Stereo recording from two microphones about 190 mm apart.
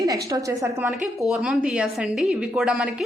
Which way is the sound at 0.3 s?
20° right (ahead or behind).